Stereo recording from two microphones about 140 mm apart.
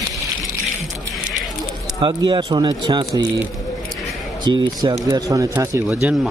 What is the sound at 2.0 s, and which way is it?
Speech, 35° right (ahead or behind).